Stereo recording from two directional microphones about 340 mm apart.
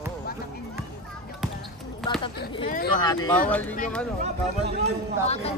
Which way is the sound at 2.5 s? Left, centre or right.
Centre.